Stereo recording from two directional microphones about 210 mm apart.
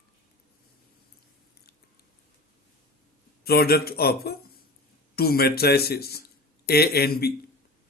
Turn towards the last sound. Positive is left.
turn(degrees=50)  # may be behind; listen again after turning